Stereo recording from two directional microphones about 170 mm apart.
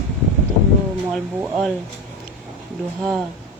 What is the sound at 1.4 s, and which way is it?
Speech, 5° right (ahead or behind).